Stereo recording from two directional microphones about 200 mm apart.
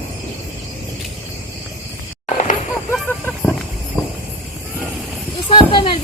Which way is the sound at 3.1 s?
10° left (ahead or behind).